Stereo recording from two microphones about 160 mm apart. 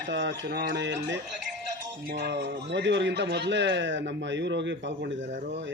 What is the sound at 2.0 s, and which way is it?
A man's voice, 90° right.